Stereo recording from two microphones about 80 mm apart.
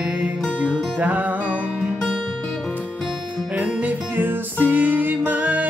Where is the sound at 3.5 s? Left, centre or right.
Centre.